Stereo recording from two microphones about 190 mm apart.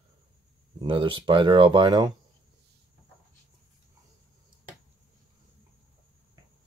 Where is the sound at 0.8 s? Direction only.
25° right (ahead or behind).